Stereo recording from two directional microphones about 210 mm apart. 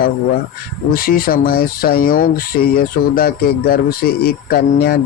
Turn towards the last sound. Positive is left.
turn(degrees=50)  # may be behind; listen again after turning